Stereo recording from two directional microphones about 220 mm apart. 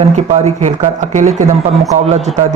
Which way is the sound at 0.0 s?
30° right (ahead or behind).